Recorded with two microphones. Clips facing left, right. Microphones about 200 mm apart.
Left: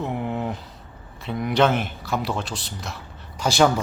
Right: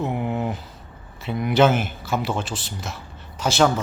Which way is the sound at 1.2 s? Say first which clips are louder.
Right 2 dB; centre (ahead or behind).